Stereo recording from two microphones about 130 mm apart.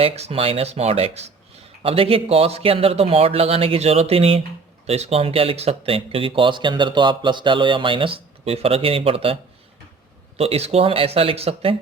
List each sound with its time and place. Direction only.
0.0 s speech: 50° right (ahead or behind)